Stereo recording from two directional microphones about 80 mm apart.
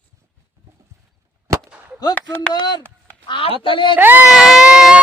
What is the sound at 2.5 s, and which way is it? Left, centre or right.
Speech, left.